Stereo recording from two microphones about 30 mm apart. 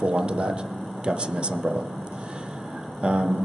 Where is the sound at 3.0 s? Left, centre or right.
Right.